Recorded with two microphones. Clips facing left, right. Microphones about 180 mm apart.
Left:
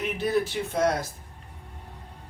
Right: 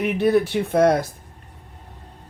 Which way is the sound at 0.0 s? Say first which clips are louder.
Right 7 dB; 60° right (ahead or behind).